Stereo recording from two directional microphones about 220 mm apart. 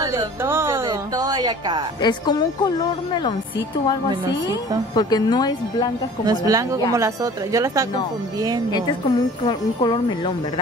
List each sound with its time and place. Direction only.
0.0 s music: 15° right (ahead or behind)
2.0 s a woman's voice: 20° left (ahead or behind)
4.5 s a woman's voice: 20° left (ahead or behind)
6.2 s speech: 15° right (ahead or behind)
9.4 s a woman's voice: 20° left (ahead or behind)